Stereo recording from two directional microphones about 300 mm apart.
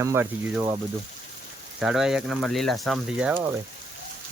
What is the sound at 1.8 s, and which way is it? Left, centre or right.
Speech, centre.